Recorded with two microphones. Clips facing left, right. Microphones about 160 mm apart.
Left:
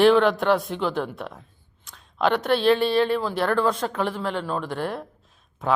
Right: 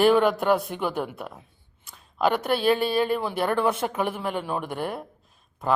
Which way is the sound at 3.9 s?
15° right (ahead or behind).